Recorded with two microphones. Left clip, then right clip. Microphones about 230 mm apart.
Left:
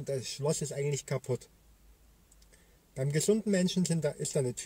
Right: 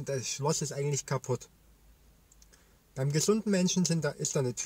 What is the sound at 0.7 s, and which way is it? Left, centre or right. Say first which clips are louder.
Speech: even; centre.